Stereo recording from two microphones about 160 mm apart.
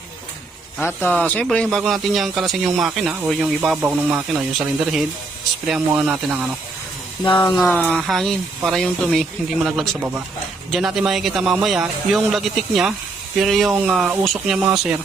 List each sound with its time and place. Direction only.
0.8 s speech: 10° left (ahead or behind); by 6.4 s 5° right (ahead or behind)
7.3 s speech: 25° left (ahead or behind)
7.7 s speech: 10° left (ahead or behind)
7.9 s speech: centre (ahead or behind)